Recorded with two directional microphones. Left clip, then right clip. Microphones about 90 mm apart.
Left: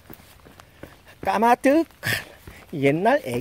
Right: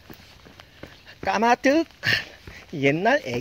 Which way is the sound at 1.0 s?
35° left (ahead or behind).